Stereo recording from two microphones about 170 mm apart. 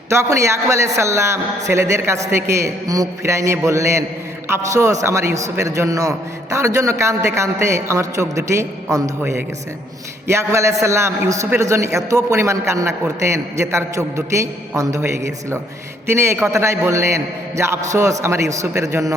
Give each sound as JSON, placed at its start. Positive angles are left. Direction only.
{"t": 0.1, "sound": "a man's voice", "side_deg": -15}